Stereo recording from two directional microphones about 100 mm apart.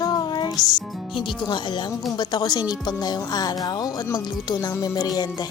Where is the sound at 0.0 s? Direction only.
40° left (ahead or behind).